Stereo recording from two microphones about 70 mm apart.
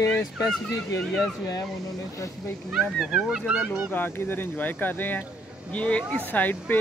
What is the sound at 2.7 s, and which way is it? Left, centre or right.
A man's voice, centre.